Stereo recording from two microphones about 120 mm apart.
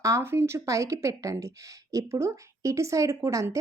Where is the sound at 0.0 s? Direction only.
25° right (ahead or behind).